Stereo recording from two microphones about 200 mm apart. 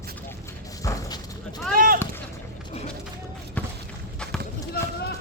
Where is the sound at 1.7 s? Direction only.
45° right (ahead or behind).